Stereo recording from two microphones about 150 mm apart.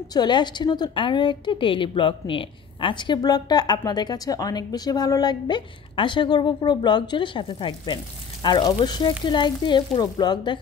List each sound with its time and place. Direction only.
0.1 s a woman's voice: 30° left (ahead or behind)